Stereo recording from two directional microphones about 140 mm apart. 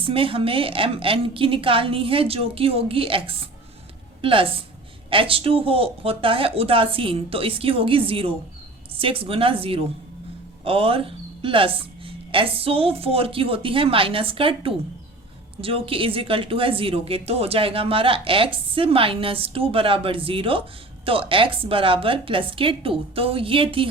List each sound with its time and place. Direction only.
0.0 s speech: 40° right (ahead or behind)